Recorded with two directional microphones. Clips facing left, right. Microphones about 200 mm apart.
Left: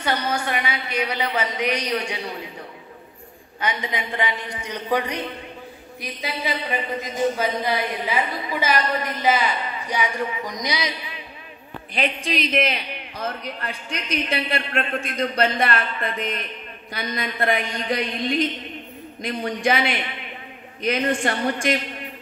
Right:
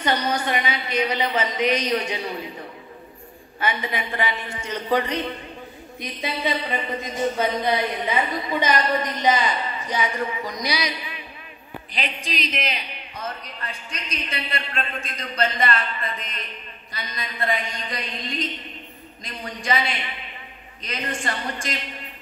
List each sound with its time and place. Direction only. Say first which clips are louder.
0.0 s a woman's voice: right 1 dB; 10° left (ahead or behind)
3.5 s a woman's voice: right 1 dB; 15° left (ahead or behind)
12.3 s a man's voice: left 7 dB; 55° left (ahead or behind)